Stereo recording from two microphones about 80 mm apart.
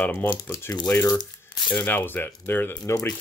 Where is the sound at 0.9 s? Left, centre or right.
Left.